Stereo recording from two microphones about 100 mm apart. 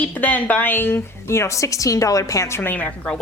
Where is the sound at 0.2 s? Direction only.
15° left (ahead or behind).